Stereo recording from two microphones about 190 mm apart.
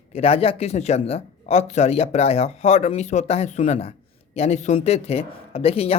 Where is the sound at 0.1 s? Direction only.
30° left (ahead or behind).